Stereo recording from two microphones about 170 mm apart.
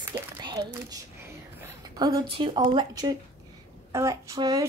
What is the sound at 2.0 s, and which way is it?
Speech, 25° right (ahead or behind).